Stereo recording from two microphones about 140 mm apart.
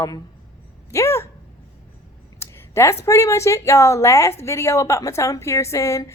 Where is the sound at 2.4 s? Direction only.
20° left (ahead or behind).